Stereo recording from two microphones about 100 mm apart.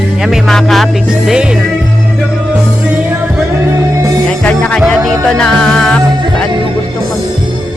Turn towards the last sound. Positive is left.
turn(degrees=10)  # may be behind; listen again after turning